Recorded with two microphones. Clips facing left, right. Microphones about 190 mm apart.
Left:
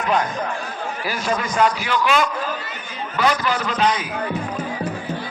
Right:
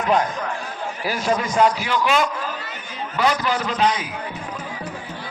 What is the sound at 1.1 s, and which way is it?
A man's voice, 25° right (ahead or behind).